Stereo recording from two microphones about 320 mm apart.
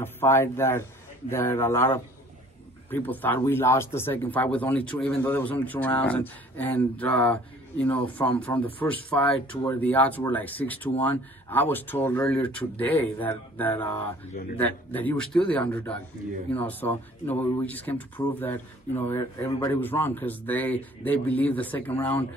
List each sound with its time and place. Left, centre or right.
0.0 s speech: centre
14.3 s speech: left
14.6 s speech: centre